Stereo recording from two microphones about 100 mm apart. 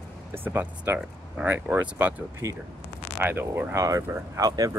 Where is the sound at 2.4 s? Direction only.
30° right (ahead or behind).